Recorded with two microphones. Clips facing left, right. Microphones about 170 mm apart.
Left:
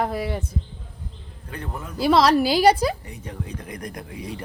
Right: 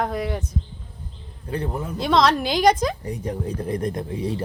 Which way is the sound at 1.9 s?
5° left (ahead or behind).